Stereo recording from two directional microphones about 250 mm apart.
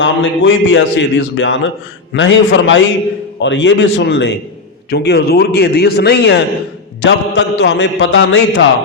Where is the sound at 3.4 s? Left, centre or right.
Left.